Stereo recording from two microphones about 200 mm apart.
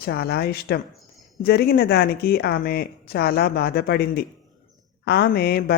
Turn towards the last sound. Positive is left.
turn(degrees=50)  # may be behind; listen again after turning